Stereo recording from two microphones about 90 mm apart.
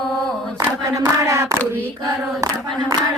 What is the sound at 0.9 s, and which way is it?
Hands, 35° right (ahead or behind).